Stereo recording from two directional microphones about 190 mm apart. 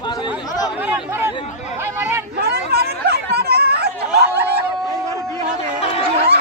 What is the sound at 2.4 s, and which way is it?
Chatter, 55° right (ahead or behind).